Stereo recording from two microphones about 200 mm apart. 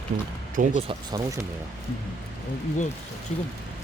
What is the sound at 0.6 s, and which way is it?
Speech, 40° right (ahead or behind).